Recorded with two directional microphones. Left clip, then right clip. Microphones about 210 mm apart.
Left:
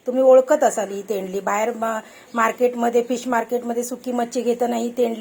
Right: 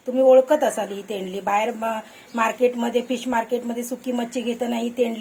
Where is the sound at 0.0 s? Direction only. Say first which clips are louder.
Left 1 dB; 25° left (ahead or behind).